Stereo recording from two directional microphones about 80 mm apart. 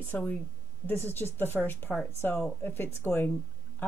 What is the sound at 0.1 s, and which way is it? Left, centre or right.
A woman's voice, centre.